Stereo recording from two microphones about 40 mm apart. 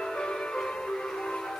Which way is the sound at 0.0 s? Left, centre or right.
Centre.